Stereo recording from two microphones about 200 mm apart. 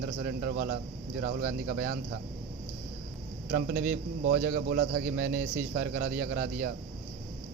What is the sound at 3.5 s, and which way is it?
A man's voice, 45° right (ahead or behind).